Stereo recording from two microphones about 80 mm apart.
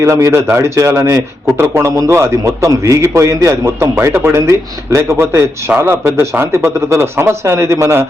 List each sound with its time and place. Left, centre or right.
0.0 s a man's voice: right